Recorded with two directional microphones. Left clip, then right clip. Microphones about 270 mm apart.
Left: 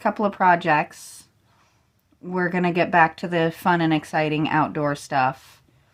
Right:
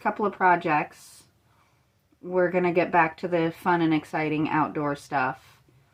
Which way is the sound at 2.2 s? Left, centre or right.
Left.